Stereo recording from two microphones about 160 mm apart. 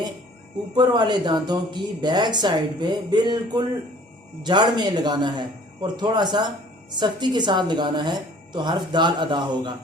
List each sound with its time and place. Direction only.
0.8 s speech: 25° right (ahead or behind)